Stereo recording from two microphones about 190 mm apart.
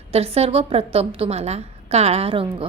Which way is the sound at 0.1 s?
30° right (ahead or behind).